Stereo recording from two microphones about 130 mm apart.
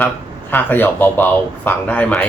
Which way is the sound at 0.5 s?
15° left (ahead or behind).